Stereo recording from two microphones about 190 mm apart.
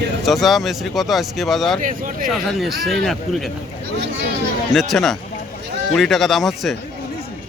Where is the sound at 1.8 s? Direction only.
45° right (ahead or behind).